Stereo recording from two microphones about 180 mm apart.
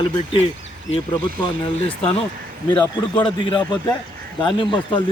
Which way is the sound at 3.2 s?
30° left (ahead or behind).